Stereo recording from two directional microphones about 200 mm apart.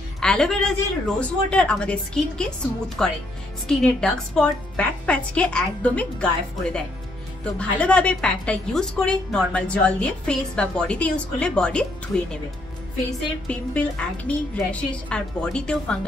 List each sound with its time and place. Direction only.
0.2 s a woman's voice: 5° left (ahead or behind)
13.5 s a woman's voice: 5° left (ahead or behind)